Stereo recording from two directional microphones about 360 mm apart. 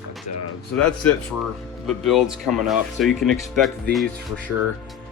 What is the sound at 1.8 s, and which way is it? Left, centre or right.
Speech, centre.